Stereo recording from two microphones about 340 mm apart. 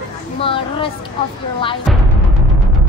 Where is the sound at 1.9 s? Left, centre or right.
Centre.